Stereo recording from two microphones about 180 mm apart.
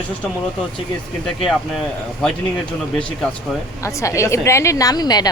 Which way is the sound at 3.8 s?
15° left (ahead or behind).